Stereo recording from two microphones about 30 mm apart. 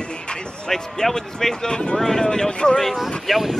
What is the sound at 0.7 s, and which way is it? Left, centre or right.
Speech, centre.